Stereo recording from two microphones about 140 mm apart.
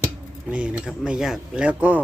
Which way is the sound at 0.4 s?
10° right (ahead or behind).